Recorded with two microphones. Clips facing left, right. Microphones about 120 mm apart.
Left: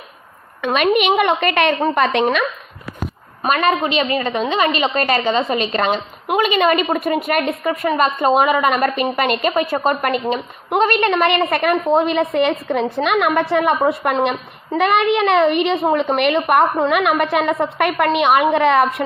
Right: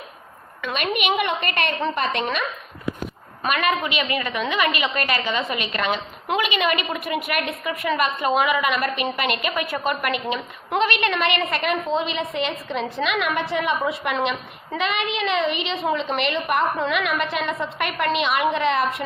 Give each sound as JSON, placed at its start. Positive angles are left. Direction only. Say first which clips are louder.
{"t": 0.6, "sound": "a woman's voice", "louder": "left 9 dB", "side_deg": 60}
{"t": 3.4, "sound": "a woman's voice", "louder": "left 5 dB", "side_deg": 35}
{"t": 7.9, "sound": "a woman's voice", "louder": "left 6 dB", "side_deg": 35}